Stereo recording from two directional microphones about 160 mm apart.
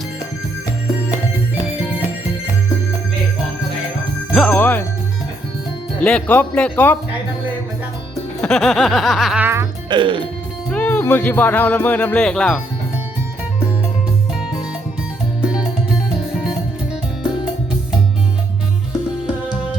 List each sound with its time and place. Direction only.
4.4 s speech: 10° left (ahead or behind)
6.0 s speech: 10° left (ahead or behind)
8.4 s speech: 5° left (ahead or behind); by 9.6 s 10° right (ahead or behind)
9.9 s speech: 30° right (ahead or behind)
10.7 s speech: 10° left (ahead or behind)
15.4 s music: 5° right (ahead or behind)